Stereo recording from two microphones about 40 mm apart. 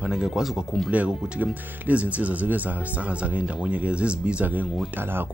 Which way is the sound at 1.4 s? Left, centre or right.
Right.